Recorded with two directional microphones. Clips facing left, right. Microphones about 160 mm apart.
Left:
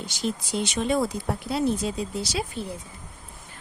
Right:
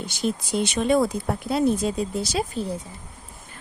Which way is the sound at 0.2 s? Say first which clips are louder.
Right 3 dB; 55° right (ahead or behind).